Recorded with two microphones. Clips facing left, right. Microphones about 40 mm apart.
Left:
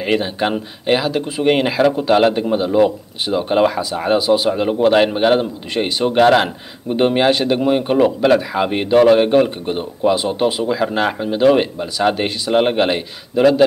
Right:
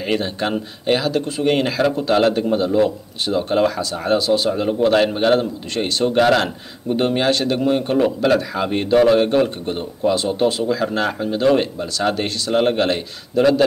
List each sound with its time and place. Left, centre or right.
0.0 s speech: centre